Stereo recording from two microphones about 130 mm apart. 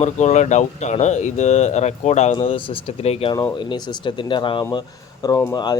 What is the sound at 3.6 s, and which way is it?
Speech, 35° left (ahead or behind).